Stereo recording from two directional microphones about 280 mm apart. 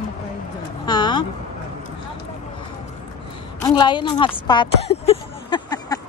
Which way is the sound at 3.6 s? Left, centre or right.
Centre.